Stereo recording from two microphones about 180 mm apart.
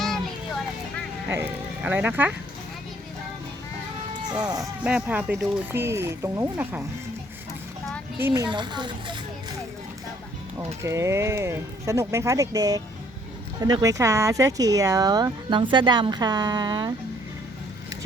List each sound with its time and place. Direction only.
1.3 s speech: 10° right (ahead or behind)
4.3 s speech: 20° right (ahead or behind)
4.8 s speech: 5° right (ahead or behind)
8.3 s speech: 25° right (ahead or behind)
10.8 s speech: 15° right (ahead or behind)